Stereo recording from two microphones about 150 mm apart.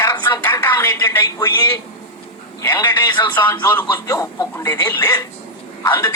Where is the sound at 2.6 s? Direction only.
20° left (ahead or behind).